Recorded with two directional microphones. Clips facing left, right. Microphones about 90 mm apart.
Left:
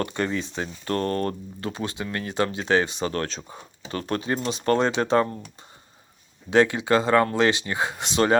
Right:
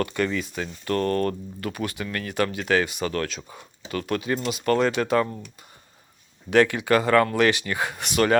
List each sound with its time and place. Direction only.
0.0 s speech: 30° left (ahead or behind)
6.5 s speech: 20° left (ahead or behind)